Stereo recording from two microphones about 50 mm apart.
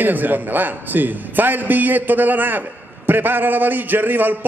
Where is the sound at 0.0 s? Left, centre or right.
Right.